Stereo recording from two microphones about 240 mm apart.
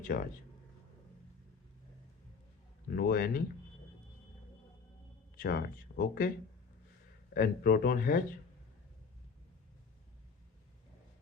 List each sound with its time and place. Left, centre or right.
0.1 s speech: left
2.9 s speech: left
5.4 s speech: left
7.3 s speech: left